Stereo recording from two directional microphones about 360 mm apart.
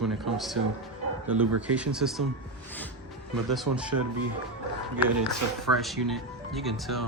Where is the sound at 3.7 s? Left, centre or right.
Right.